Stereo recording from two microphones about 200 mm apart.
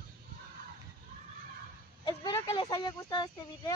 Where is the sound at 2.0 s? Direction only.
20° left (ahead or behind).